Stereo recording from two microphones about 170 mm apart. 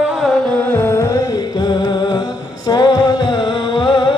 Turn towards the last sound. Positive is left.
turn(degrees=25)  # may be behind; listen again after turning